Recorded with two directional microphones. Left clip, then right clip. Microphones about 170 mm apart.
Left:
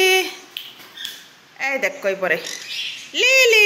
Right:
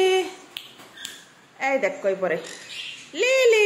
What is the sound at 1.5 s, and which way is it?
Speech, 15° right (ahead or behind).